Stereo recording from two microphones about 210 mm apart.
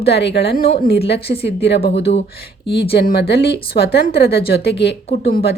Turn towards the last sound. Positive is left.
turn(degrees=50)  # may be behind; listen again after turning